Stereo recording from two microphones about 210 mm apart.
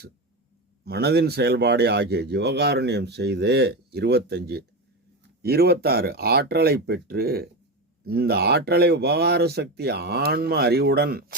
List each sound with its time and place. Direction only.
0.9 s speech: 50° right (ahead or behind)